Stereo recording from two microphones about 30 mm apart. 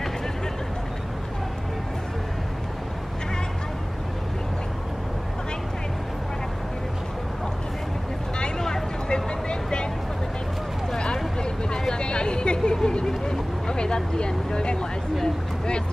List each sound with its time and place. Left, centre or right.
8.5 s vehicle: centre
9.1 s vehicle: left
11.9 s a sound: left
12.8 s vehicle: left